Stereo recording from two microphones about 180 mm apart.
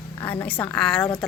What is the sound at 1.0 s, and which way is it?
Speech, 15° left (ahead or behind).